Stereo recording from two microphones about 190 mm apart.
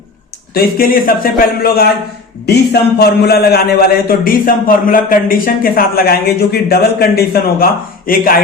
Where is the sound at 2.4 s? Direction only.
60° left (ahead or behind).